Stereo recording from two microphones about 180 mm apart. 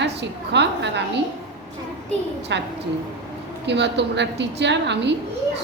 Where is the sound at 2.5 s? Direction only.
80° right.